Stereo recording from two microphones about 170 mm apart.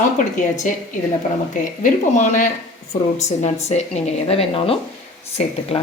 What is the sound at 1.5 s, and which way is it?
A woman's voice, 50° left (ahead or behind).